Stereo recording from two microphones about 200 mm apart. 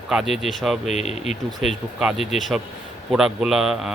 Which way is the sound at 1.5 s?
5° right (ahead or behind).